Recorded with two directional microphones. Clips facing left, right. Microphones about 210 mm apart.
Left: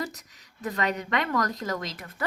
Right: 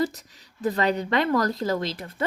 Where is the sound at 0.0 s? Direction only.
30° right (ahead or behind).